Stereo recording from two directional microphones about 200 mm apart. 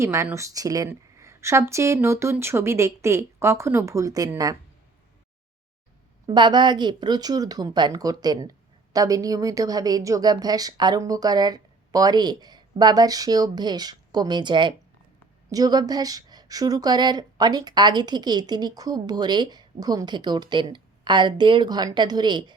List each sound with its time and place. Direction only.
0.0 s a woman's voice: 15° right (ahead or behind)
6.2 s a woman's voice: 20° right (ahead or behind)